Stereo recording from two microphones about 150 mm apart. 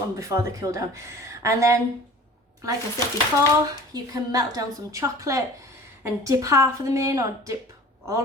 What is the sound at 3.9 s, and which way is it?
Speech, 25° right (ahead or behind).